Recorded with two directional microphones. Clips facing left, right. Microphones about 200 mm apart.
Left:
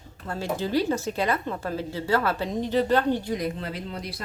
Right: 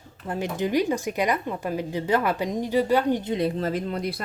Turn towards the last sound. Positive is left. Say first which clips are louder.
# right 7 dB
turn(degrees=-50)  # may be behind; listen again after turning